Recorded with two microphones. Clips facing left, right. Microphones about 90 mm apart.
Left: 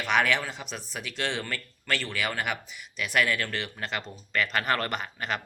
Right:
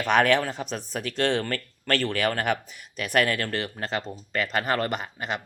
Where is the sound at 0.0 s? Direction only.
45° right (ahead or behind).